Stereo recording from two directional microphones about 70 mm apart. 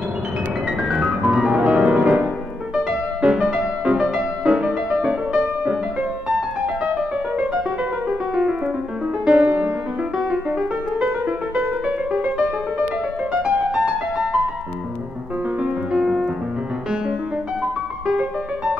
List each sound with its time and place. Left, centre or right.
0.8 s piano: centre
2.7 s music: centre
8.1 s piano: centre
9.2 s music: centre
15.6 s music: centre